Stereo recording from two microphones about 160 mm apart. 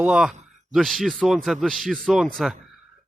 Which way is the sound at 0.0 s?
5° right (ahead or behind).